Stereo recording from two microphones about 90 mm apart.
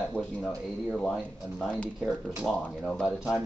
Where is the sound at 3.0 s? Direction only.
10° right (ahead or behind).